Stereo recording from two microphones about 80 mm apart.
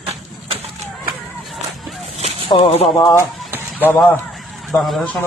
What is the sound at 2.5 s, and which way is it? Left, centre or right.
Speech, left.